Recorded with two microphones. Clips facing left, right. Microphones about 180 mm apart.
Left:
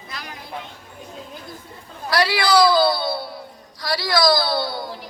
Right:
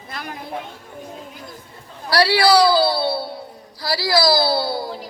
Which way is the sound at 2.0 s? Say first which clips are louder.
Right 4 dB; 35° right (ahead or behind).